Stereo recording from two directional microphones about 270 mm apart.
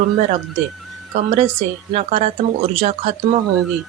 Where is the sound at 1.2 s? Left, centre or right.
Right.